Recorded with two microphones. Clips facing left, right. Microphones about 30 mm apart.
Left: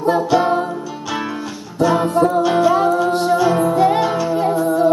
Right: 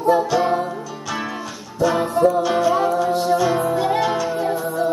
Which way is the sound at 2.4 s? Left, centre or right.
Centre.